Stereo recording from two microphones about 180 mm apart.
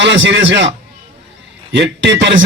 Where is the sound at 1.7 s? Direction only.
75° right (ahead or behind).